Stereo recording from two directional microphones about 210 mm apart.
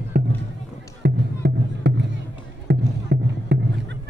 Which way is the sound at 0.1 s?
40° right (ahead or behind).